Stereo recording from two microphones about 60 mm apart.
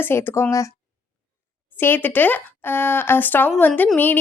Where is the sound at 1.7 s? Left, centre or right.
Left.